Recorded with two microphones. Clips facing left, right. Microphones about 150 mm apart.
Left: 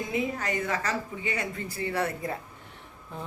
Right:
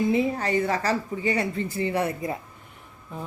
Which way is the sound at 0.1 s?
30° right (ahead or behind).